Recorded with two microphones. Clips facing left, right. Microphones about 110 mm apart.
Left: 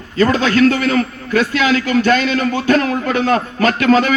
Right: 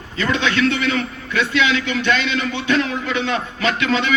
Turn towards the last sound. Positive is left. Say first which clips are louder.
# left 6 dB
turn(degrees=45)  # may be behind; listen again after turning